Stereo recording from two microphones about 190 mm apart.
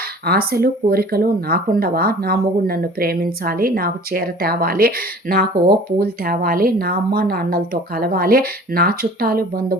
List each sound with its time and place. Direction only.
0.3 s speech: 55° right (ahead or behind)